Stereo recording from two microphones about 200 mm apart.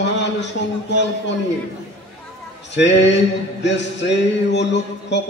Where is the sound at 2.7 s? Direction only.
60° left (ahead or behind).